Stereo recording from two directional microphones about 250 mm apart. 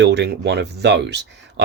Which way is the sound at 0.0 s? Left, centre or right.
Right.